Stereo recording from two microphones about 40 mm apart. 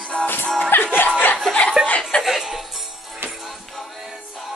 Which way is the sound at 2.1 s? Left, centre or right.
Left.